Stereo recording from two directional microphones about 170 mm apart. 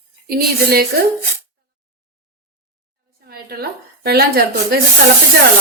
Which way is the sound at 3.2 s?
65° right (ahead or behind).